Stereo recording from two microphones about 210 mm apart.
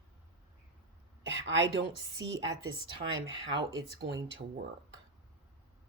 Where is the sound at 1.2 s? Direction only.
60° right (ahead or behind).